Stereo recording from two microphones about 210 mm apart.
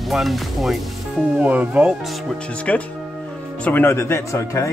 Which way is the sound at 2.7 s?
5° left (ahead or behind).